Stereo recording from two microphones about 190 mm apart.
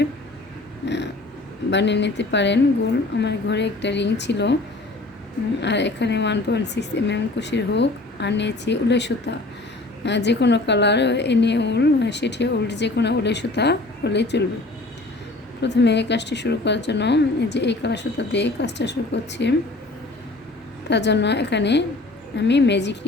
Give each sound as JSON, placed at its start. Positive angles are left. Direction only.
{"t": 0.9, "sound": "vehicle", "side_deg": 65}
{"t": 1.7, "sound": "a woman's voice", "side_deg": 65}
{"t": 5.5, "sound": "a woman's voice", "side_deg": 65}
{"t": 15.6, "sound": "a woman's voice", "side_deg": 65}
{"t": 20.9, "sound": "a woman's voice", "side_deg": 65}